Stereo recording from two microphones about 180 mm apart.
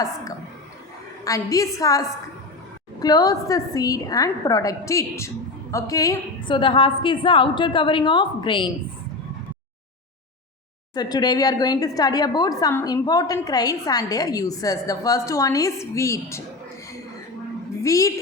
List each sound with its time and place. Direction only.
1.2 s a woman's voice: 20° left (ahead or behind)
10.9 s a woman's voice: 20° left (ahead or behind)
17.8 s a woman's voice: 15° left (ahead or behind)